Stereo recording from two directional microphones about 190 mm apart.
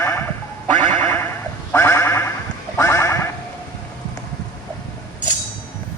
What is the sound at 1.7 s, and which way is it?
Sheep, 10° left (ahead or behind).